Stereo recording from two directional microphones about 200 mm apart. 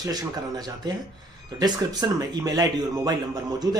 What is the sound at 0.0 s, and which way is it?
Speech, 20° right (ahead or behind).